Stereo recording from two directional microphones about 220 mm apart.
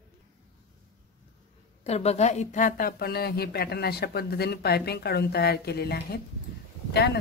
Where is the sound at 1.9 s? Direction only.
30° left (ahead or behind).